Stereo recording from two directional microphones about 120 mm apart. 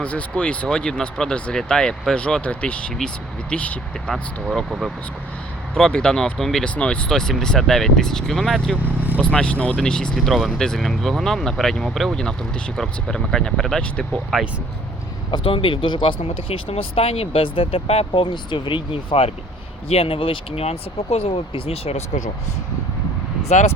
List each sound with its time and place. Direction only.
0.0 s speech: 10° left (ahead or behind)
8.7 s speech: 15° right (ahead or behind)
9.2 s speech: 10° left (ahead or behind)
15.3 s speech: 45° left (ahead or behind)
23.5 s speech: 65° left (ahead or behind)